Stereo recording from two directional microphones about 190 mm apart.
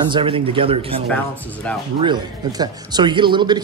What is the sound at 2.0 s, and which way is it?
Speech, 20° right (ahead or behind).